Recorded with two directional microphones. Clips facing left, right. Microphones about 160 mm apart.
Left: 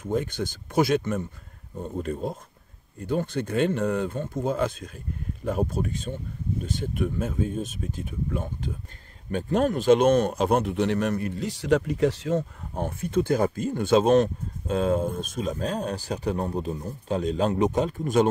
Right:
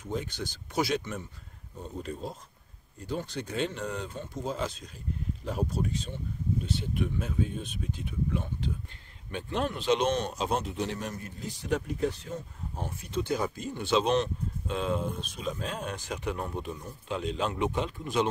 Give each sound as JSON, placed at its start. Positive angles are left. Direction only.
{"t": 0.0, "sound": "speech", "side_deg": 50}
{"t": 12.8, "sound": "speech", "side_deg": 50}